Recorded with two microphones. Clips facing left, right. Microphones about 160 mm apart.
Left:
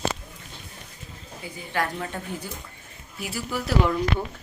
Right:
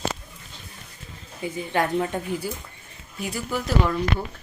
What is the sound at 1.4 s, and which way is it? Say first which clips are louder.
Speech: right 4 dB; 20° right (ahead or behind).